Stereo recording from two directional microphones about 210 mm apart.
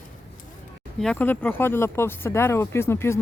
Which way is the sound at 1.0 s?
5° left (ahead or behind).